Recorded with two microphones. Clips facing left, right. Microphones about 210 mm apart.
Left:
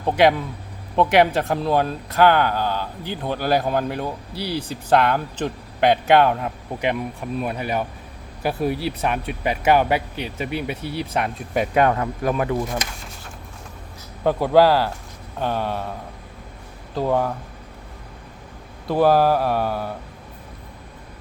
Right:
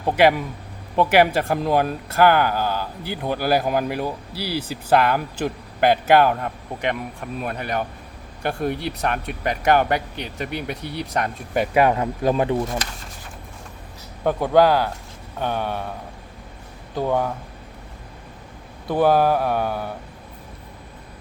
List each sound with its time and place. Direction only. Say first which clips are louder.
0.0 s speech: even; 5° right (ahead or behind)
11.9 s speech: right 2 dB; 25° right (ahead or behind)
14.3 s speech: left 1 dB; 5° left (ahead or behind)
16.9 s speech: left 1 dB; centre (ahead or behind)
18.9 s speech: left 1 dB; centre (ahead or behind)